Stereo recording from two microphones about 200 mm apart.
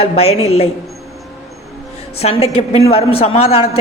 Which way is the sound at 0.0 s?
30° left (ahead or behind).